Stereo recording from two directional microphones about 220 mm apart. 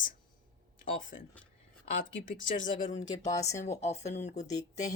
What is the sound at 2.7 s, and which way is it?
Speech, 35° left (ahead or behind).